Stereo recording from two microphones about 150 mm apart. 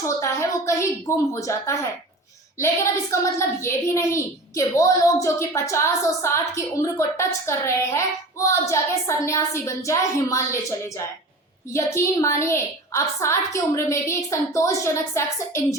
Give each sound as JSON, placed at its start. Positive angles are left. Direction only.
{"t": 0.2, "sound": "a woman's voice", "side_deg": 20}
{"t": 3.1, "sound": "a woman's voice", "side_deg": 20}